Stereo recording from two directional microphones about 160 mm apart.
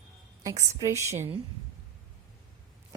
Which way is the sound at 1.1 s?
40° right (ahead or behind).